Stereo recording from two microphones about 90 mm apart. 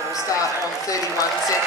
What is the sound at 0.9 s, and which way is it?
Speech, 40° left (ahead or behind).